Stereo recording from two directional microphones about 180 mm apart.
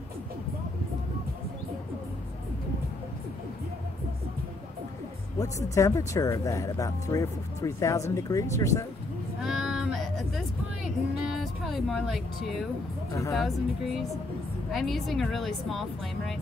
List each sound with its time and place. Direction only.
5.8 s speech: 15° left (ahead or behind)
9.4 s a sound: centre (ahead or behind)
11.3 s speech: centre (ahead or behind)